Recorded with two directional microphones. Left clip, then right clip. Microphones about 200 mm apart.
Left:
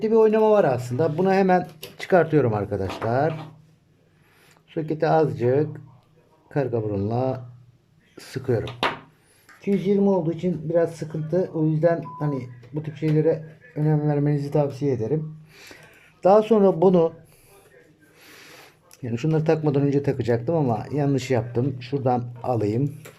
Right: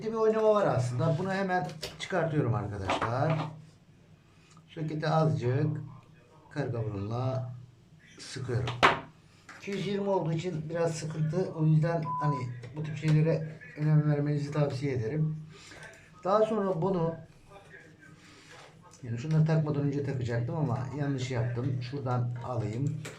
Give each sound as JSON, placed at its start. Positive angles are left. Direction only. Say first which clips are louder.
{"t": 0.0, "sound": "a man's voice", "louder": "left 9 dB", "side_deg": 50}
{"t": 4.7, "sound": "a man's voice", "louder": "left 10 dB", "side_deg": 45}
{"t": 16.2, "sound": "a man's voice", "louder": "left 10 dB", "side_deg": 50}
{"t": 18.9, "sound": "a man's voice", "louder": "left 13 dB", "side_deg": 55}